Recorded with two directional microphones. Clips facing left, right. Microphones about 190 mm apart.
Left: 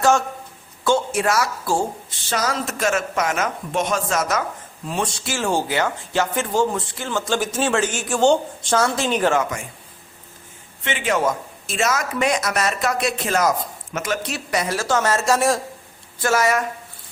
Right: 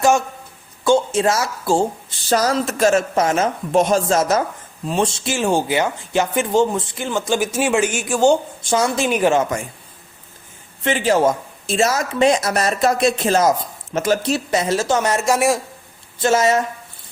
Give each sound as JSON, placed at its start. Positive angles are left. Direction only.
{"t": 0.9, "sound": "speech", "side_deg": -20}
{"t": 2.3, "sound": "a man's voice", "side_deg": -35}
{"t": 10.8, "sound": "speech", "side_deg": -35}
{"t": 16.2, "sound": "speech", "side_deg": -20}